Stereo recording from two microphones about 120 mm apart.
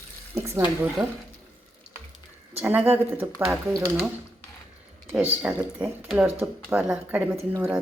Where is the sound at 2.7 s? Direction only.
15° right (ahead or behind).